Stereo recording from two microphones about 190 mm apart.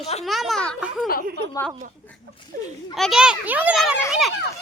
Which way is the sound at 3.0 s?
Centre (ahead or behind).